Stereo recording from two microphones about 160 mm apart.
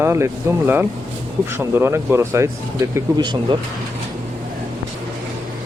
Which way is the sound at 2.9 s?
30° right (ahead or behind).